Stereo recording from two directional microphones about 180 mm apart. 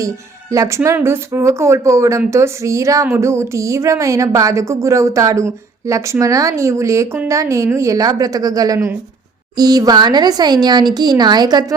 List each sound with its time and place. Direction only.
0.5 s speech: 15° right (ahead or behind)